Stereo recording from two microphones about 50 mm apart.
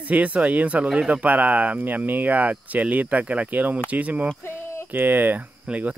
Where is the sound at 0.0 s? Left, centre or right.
Right.